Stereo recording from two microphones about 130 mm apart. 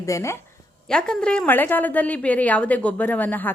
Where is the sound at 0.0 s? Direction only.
20° left (ahead or behind).